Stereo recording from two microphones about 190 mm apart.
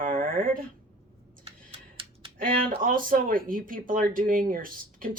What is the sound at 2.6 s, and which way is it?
Speech, 45° right (ahead or behind).